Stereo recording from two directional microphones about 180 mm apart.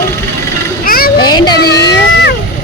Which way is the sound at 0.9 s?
55° left (ahead or behind).